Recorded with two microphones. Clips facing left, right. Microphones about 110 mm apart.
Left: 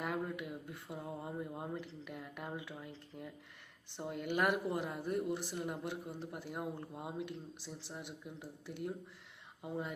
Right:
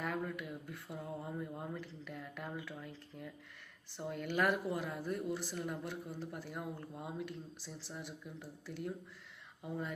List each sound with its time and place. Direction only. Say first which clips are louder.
0.0 s speech: left 1 dB; 20° left (ahead or behind)